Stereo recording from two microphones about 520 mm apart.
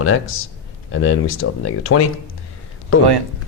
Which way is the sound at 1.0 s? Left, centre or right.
Left.